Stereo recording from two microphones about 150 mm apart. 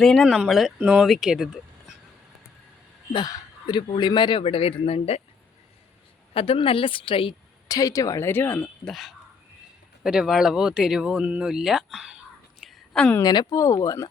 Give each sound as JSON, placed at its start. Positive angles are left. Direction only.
{"t": 0.0, "sound": "speech", "side_deg": 5}
{"t": 3.1, "sound": "speech", "side_deg": 30}
{"t": 6.3, "sound": "a woman's voice", "side_deg": 35}
{"t": 7.8, "sound": "speech", "side_deg": 25}
{"t": 8.9, "sound": "speech", "side_deg": 0}
{"t": 13.2, "sound": "speech", "side_deg": 30}